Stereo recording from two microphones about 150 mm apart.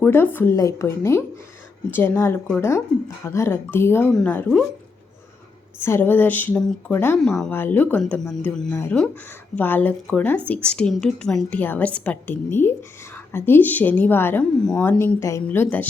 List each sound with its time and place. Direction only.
0.0 s a woman's voice: 15° left (ahead or behind)
5.8 s a woman's voice: 15° left (ahead or behind)
8.7 s a woman's voice: 15° left (ahead or behind)